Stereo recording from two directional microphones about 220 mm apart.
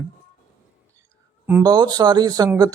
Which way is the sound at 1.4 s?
15° right (ahead or behind).